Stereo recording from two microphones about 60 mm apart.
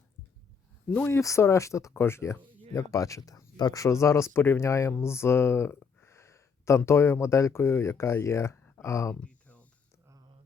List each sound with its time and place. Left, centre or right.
0.9 s speech: left
1.1 s speech: left
2.0 s speech: left
4.0 s speech: left
8.5 s a sound: left
8.8 s speech: left
9.2 s a sound: left